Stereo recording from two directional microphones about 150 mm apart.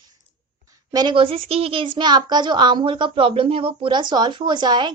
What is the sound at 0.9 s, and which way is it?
A woman's voice, 30° right (ahead or behind).